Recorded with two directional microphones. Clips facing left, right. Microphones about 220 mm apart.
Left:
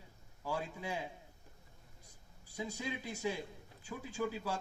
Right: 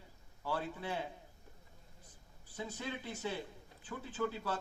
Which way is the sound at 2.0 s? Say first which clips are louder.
Right 1 dB; 10° left (ahead or behind).